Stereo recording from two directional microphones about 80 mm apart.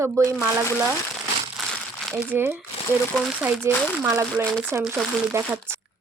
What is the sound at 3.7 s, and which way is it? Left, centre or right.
Speech, right.